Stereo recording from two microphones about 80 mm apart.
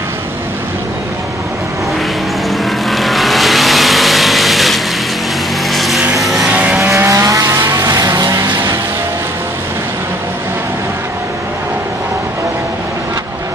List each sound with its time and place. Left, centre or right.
2.6 s vehicle: centre
6.5 s vehicle: centre
6.8 s vehicle: right
7.1 s vehicle: right